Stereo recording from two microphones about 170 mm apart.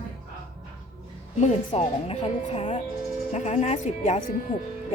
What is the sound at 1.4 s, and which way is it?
A woman's voice, 40° left (ahead or behind).